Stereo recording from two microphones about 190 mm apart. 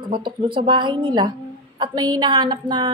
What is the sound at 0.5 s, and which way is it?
A woman's voice, 25° right (ahead or behind).